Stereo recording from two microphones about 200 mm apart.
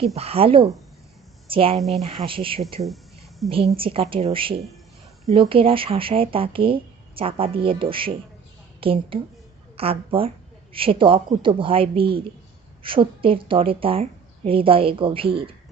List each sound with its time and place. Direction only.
0.2 s a woman's voice: 30° right (ahead or behind)